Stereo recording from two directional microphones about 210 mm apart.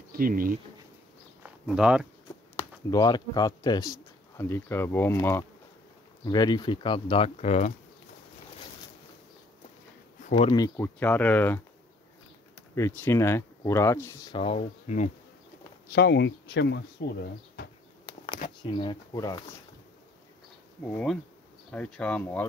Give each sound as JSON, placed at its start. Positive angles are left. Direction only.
{"t": 0.1, "sound": "speech", "side_deg": -40}
{"t": 1.4, "sound": "a sound", "side_deg": -5}
{"t": 2.5, "sound": "speech", "side_deg": 15}
{"t": 10.3, "sound": "speech", "side_deg": 20}
{"t": 12.7, "sound": "speech", "side_deg": 15}
{"t": 14.4, "sound": "speech", "side_deg": 30}
{"t": 15.9, "sound": "speech", "side_deg": 55}
{"t": 18.6, "sound": "speech", "side_deg": 20}
{"t": 20.9, "sound": "speech", "side_deg": 0}